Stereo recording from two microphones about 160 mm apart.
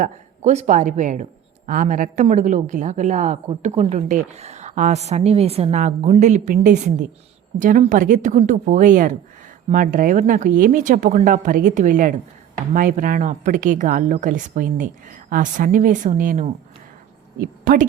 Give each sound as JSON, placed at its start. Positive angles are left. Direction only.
{"t": 0.0, "sound": "speech", "side_deg": -50}